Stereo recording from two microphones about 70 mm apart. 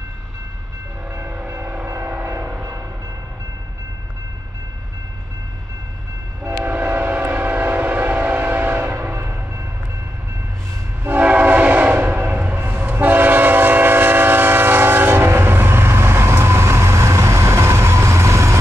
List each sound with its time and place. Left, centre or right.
1.1 s train: right
1.9 s vehicle: right
6.4 s train: right
11.1 s train: right